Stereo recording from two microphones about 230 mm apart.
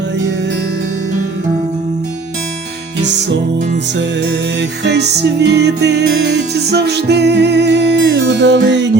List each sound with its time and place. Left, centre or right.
4.8 s music: right